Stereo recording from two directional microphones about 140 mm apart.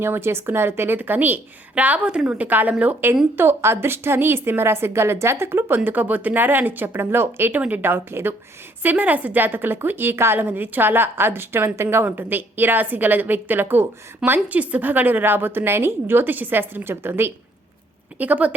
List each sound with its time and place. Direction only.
0.0 s a woman's voice: 15° right (ahead or behind)